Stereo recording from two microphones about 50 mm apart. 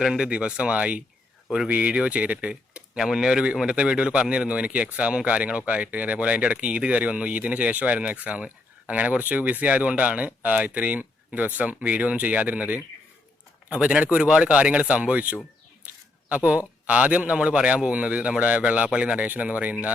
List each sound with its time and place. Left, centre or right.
0.0 s speech: centre
0.3 s a man's voice: right
3.0 s a man's voice: centre; by 19.9 s right